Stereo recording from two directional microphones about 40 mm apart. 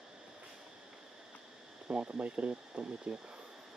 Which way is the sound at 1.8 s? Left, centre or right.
Right.